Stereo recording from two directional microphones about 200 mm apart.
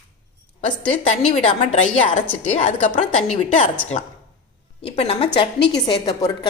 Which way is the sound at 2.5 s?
35° left (ahead or behind).